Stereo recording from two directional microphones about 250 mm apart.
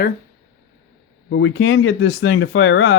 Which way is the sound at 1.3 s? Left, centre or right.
Left.